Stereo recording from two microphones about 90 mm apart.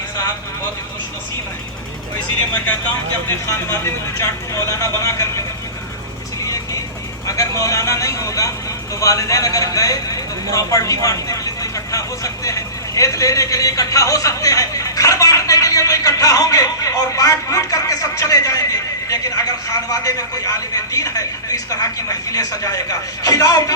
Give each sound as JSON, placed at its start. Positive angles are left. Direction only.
{"t": 3.4, "sound": "speech", "side_deg": 30}
{"t": 6.4, "sound": "vehicle", "side_deg": 40}
{"t": 7.3, "sound": "speech", "side_deg": 40}